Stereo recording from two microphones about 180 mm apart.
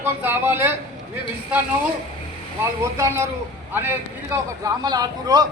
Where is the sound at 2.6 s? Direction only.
15° right (ahead or behind).